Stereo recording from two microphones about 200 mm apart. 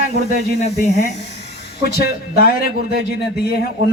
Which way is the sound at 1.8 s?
50° left (ahead or behind).